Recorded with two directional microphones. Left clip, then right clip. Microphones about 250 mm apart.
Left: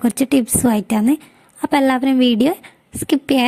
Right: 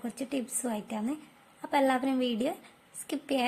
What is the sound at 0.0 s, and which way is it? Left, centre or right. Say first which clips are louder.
A woman's voice: left 18 dB; left.